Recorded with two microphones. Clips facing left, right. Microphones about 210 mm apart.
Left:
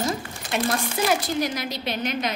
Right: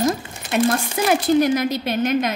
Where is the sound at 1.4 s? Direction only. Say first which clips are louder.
Right 8 dB; 50° right (ahead or behind).